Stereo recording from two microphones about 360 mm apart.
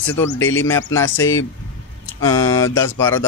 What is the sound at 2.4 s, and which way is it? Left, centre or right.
Speech, centre.